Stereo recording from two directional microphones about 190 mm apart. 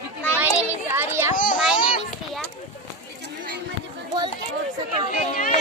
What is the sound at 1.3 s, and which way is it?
Children playing, 45° left (ahead or behind).